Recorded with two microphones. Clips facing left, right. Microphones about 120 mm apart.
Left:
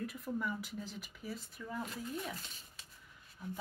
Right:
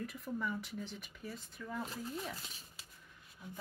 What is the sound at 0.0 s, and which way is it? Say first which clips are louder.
Speech: left 1 dB; centre (ahead or behind).